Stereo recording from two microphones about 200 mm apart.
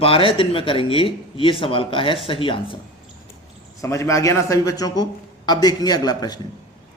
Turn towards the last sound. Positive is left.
turn(degrees=20)  # may be behind; listen again after turning